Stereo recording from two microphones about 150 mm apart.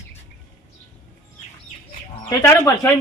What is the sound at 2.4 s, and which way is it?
Speech, 20° left (ahead or behind).